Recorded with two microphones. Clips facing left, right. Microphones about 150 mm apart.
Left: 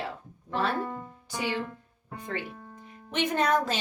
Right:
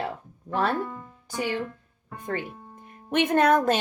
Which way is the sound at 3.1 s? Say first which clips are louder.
Right 5 dB; 55° right (ahead or behind).